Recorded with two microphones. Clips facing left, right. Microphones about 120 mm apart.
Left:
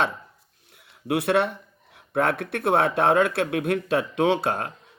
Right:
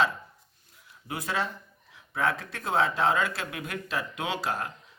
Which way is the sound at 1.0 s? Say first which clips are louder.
Left 10 dB; 70° left (ahead or behind).